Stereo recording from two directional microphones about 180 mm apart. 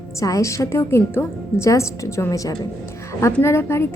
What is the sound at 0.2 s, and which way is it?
A woman's voice, 15° left (ahead or behind).